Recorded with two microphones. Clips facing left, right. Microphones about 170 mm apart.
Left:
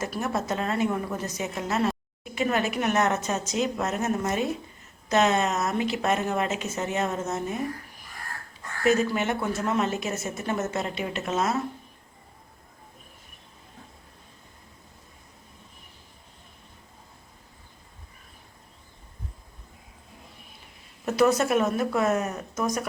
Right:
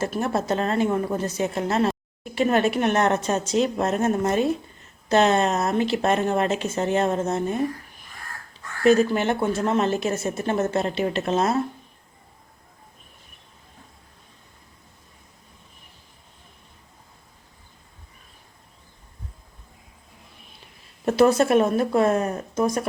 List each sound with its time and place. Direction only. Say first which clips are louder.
0.0 s a woman's voice: right 4 dB; 30° right (ahead or behind)
8.8 s a woman's voice: right 5 dB; 30° right (ahead or behind)
21.0 s a woman's voice: right 4 dB; 30° right (ahead or behind)